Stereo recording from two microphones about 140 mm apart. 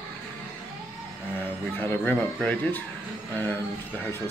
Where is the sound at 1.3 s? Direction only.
15° left (ahead or behind).